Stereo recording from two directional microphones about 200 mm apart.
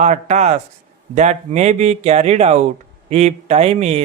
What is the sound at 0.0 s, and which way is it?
Speech, 35° right (ahead or behind).